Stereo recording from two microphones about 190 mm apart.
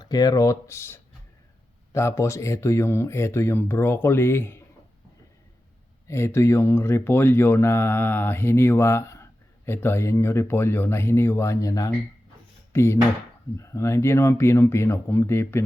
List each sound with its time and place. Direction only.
0.0 s speech: 20° left (ahead or behind)
6.1 s speech: 15° left (ahead or behind)